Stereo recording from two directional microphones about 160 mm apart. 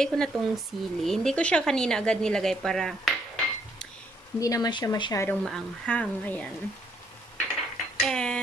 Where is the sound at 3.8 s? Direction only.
5° left (ahead or behind).